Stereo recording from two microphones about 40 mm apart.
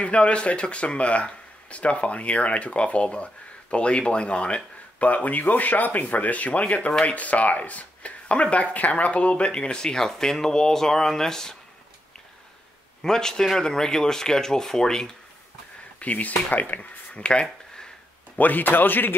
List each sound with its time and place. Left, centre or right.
0.0 s speech: left; by 11.5 s centre
13.0 s speech: centre
16.0 s speech: left
17.1 s a sound: left
18.4 s speech: left